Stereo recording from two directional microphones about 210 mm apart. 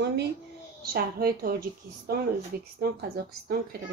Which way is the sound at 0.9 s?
45° right (ahead or behind).